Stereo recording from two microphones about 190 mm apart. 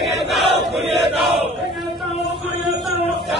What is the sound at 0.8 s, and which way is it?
Chant, 30° right (ahead or behind).